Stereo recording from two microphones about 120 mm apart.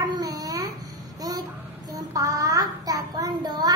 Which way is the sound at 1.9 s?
30° right (ahead or behind).